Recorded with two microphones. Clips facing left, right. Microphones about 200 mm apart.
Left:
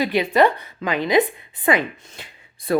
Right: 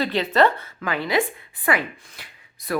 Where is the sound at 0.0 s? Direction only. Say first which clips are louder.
Left 2 dB; 10° left (ahead or behind).